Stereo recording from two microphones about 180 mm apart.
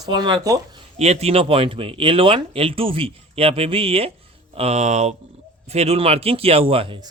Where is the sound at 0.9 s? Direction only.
35° right (ahead or behind).